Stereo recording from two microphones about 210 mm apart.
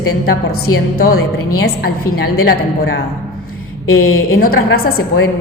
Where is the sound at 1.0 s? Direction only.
45° left (ahead or behind).